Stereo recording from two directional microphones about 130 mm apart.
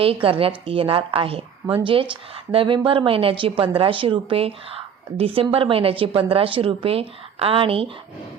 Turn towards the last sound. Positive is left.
turn(degrees=-45)  # may be behind; listen again after turning